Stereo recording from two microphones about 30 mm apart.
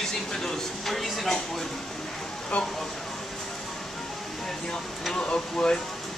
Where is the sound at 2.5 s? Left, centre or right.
Left.